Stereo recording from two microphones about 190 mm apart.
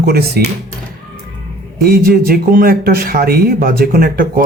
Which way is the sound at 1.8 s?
50° right (ahead or behind).